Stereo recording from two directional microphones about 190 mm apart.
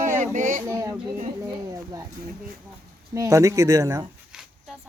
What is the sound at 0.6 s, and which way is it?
Speech, 15° right (ahead or behind).